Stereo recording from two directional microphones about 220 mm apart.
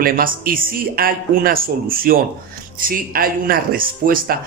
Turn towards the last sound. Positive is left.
turn(degrees=-40)  # may be behind; listen again after turning